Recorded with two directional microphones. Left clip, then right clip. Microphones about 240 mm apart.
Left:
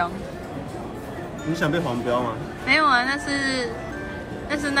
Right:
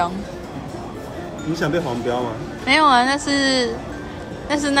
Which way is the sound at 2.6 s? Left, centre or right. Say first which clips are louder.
Right 4 dB; centre.